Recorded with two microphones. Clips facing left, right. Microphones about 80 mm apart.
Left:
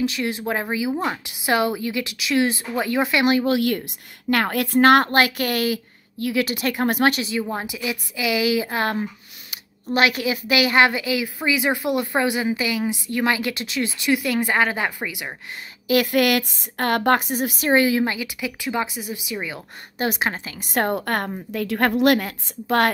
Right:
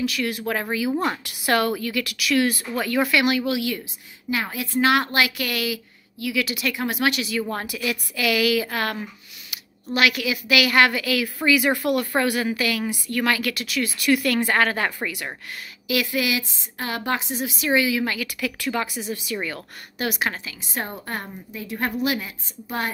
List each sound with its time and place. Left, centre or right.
0.0 s a woman's voice: left
4.3 s a woman's voice: left
7.3 s a woman's voice: centre
15.9 s a woman's voice: left
18.0 s speech: left
20.0 s a woman's voice: left
20.7 s a woman's voice: left